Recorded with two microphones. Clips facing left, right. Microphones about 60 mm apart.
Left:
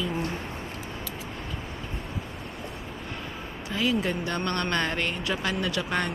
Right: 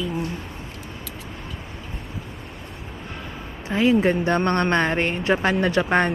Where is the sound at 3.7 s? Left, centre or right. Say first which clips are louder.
Right 8 dB; right.